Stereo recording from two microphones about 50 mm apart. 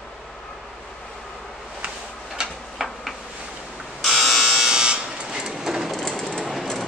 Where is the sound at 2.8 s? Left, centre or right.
Centre.